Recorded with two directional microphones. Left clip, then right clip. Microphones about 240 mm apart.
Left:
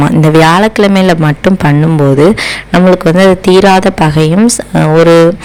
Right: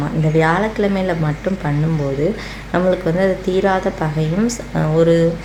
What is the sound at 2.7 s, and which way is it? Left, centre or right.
Speech, left.